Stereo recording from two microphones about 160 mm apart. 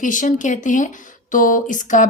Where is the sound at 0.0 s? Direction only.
55° left (ahead or behind).